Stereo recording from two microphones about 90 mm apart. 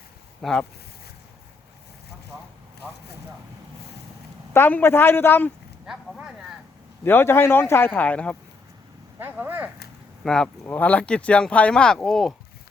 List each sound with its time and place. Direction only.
0.4 s speech: 5° left (ahead or behind)
4.5 s speech: 25° left (ahead or behind)
7.0 s speech: 25° left (ahead or behind)
9.1 s speech: 25° right (ahead or behind)
10.2 s speech: 5° left (ahead or behind)
10.7 s speech: 20° left (ahead or behind)